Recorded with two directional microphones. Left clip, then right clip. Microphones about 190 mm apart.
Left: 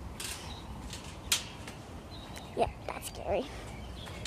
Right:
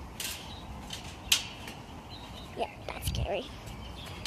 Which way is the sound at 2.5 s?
10° left (ahead or behind).